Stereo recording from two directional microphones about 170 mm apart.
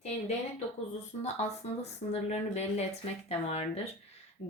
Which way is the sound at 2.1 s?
40° left (ahead or behind).